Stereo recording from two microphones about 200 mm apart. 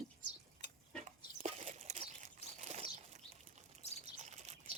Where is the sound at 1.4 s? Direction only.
35° right (ahead or behind).